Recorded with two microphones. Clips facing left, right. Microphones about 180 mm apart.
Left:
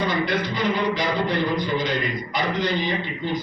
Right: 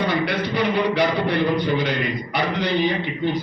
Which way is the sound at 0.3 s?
65° right (ahead or behind).